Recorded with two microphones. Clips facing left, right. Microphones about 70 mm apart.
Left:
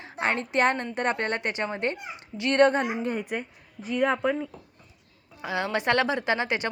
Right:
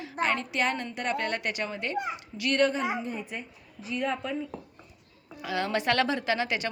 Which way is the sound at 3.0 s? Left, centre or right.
Left.